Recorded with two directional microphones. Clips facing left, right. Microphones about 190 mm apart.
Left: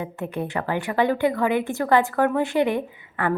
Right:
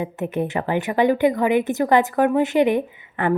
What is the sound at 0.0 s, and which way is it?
A woman's voice, 20° right (ahead or behind).